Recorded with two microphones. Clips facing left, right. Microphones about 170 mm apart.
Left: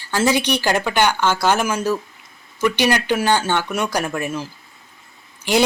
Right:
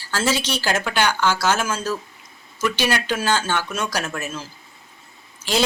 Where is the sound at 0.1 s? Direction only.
15° left (ahead or behind).